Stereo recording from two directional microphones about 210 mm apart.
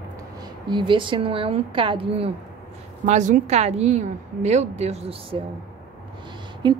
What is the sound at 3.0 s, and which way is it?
A woman's voice, 35° right (ahead or behind).